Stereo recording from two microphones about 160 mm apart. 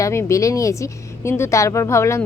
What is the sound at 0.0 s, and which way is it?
Speech, 15° left (ahead or behind).